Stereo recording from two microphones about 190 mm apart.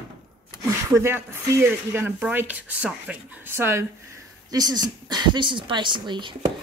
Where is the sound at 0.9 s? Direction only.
15° right (ahead or behind).